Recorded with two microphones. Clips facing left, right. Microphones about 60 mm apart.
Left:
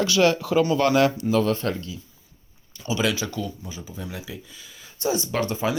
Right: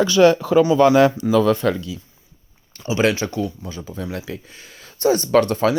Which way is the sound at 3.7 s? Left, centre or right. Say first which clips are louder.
Right 6 dB; right.